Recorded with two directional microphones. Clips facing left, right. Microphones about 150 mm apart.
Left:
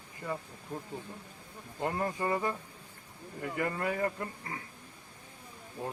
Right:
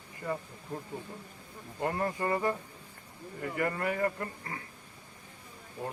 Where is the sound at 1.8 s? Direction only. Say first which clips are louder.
Right 1 dB; 15° left (ahead or behind).